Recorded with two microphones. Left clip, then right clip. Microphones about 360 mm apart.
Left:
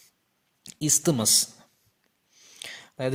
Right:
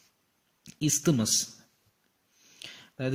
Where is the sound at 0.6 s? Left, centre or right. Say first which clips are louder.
Left 3 dB; centre.